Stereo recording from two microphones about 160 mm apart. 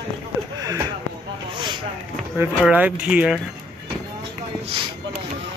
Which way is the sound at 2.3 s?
10° right (ahead or behind).